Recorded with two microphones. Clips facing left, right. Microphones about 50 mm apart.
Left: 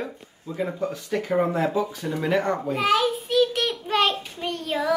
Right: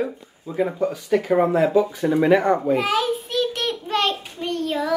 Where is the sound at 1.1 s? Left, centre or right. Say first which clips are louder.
Right 5 dB; centre.